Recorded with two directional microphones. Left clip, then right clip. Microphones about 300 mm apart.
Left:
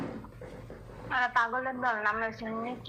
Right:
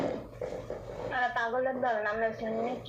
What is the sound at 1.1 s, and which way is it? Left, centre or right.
A woman's voice, left.